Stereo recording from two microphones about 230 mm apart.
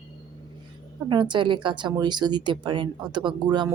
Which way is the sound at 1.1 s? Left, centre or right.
Centre.